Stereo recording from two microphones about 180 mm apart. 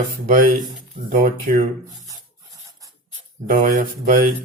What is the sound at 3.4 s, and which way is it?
Speech, 45° right (ahead or behind).